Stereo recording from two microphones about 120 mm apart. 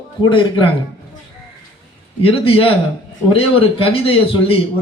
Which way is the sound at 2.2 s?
50° left (ahead or behind).